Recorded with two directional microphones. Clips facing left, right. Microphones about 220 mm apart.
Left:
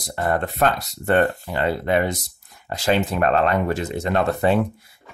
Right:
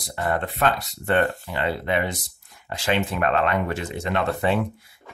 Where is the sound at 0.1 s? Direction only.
45° left (ahead or behind).